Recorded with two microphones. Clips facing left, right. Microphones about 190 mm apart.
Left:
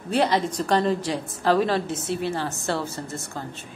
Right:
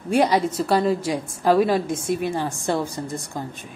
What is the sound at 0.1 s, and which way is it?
A woman's voice, 10° right (ahead or behind).